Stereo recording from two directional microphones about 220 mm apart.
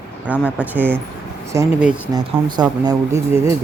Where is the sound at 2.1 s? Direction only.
20° right (ahead or behind).